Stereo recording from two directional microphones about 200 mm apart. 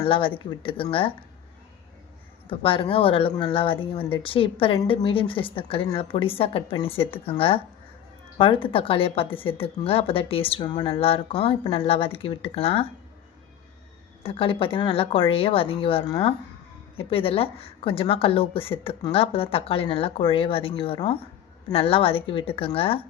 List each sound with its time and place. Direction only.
0.1 s a woman's voice: 25° left (ahead or behind)
2.5 s a woman's voice: 25° left (ahead or behind)
14.3 s a woman's voice: 25° left (ahead or behind)